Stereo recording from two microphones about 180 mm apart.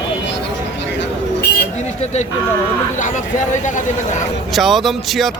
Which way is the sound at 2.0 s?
40° left (ahead or behind).